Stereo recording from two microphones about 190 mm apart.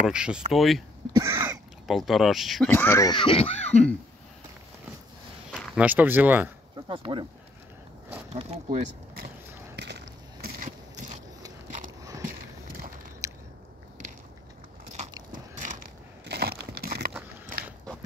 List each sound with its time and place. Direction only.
0.0 s speech: 5° right (ahead or behind)
1.1 s a sound: 15° right (ahead or behind)
1.9 s speech: centre (ahead or behind)
2.7 s speech: 10° left (ahead or behind); by 3.8 s 35° left (ahead or behind)
5.8 s speech: 10° right (ahead or behind)
6.9 s speech: 25° right (ahead or behind)
8.3 s speech: 35° right (ahead or behind)
9.8 s a sound: 60° right (ahead or behind)
13.2 s biting: 15° right (ahead or behind)
15.3 s biting: 45° right (ahead or behind)
16.3 s crumpling: 55° right (ahead or behind)